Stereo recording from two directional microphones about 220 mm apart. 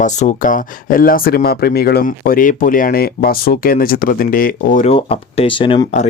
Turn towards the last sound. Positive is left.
turn(degrees=25)  # may be behind; listen again after turning